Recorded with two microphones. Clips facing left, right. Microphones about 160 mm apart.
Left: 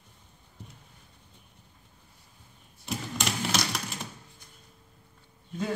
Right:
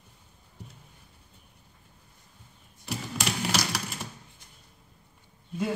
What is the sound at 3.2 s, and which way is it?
Typing, centre (ahead or behind).